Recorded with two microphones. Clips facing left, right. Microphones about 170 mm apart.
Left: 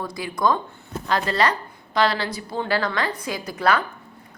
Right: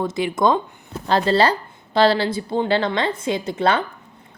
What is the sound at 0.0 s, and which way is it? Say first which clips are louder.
A woman's voice: right 5 dB; 25° right (ahead or behind).